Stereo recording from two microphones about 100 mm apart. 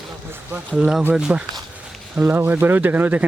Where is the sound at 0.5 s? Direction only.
10° right (ahead or behind).